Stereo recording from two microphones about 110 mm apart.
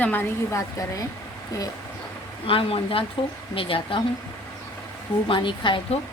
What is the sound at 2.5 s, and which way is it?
A woman's voice, 55° left (ahead or behind).